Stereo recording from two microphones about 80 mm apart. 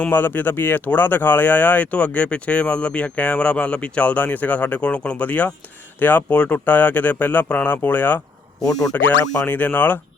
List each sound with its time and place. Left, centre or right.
0.0 s speech: left
8.6 s speech: centre
9.5 s speech: left